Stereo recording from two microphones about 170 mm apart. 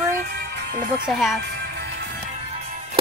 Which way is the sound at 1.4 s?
75° right (ahead or behind).